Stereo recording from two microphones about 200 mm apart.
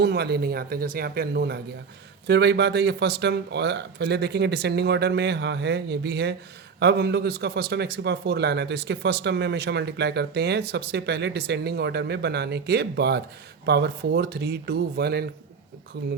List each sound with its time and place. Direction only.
0.0 s speech: 55° right (ahead or behind)